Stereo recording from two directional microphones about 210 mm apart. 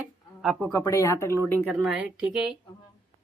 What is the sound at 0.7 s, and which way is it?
Speech, 10° left (ahead or behind).